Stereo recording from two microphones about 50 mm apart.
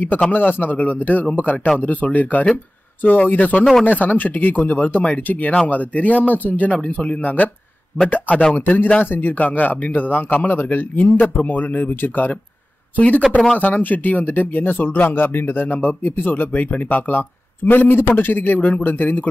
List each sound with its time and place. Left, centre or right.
0.3 s speech: left
2.5 s a sound: left
3.3 s speech: left